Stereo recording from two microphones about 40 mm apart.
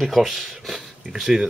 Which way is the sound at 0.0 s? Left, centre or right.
Centre.